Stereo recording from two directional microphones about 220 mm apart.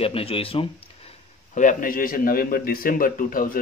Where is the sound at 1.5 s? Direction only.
35° left (ahead or behind).